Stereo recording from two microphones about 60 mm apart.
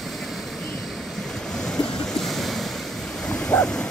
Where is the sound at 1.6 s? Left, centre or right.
Centre.